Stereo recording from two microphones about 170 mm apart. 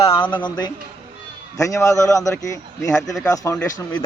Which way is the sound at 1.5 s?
20° left (ahead or behind).